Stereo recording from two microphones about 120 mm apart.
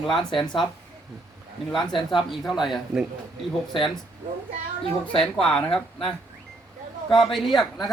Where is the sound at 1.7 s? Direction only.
5° left (ahead or behind).